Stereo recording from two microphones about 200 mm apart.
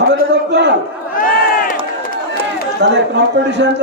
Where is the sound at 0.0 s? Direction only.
60° right (ahead or behind).